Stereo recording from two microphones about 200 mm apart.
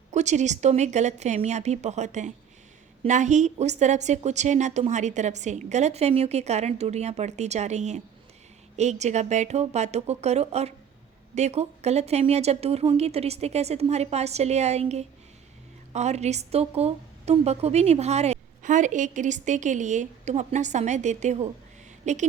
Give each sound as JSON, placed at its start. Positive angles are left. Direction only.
{"t": 0.1, "sound": "a woman's voice", "side_deg": -35}